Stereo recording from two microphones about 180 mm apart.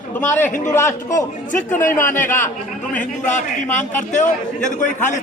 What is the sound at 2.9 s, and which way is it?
A man's voice, 45° left (ahead or behind).